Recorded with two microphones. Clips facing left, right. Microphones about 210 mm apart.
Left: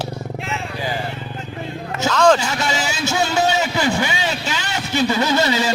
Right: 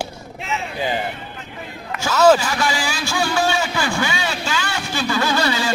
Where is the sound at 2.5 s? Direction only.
20° left (ahead or behind).